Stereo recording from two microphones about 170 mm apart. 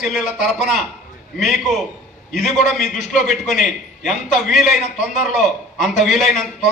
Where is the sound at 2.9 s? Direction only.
50° left (ahead or behind).